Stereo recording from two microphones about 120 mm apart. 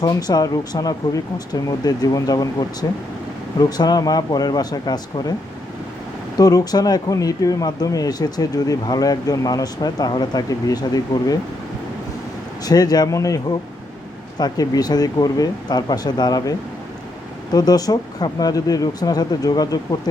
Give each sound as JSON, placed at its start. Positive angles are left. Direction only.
{"t": 0.0, "sound": "speech", "side_deg": 35}
{"t": 6.3, "sound": "speech", "side_deg": 30}
{"t": 12.6, "sound": "speech", "side_deg": 35}